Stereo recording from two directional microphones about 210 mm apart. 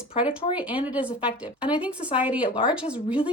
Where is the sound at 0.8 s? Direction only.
5° right (ahead or behind).